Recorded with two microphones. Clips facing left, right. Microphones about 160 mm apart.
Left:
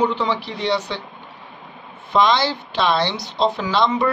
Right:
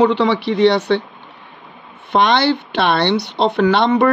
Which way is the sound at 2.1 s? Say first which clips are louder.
Right 3 dB; 65° right (ahead or behind).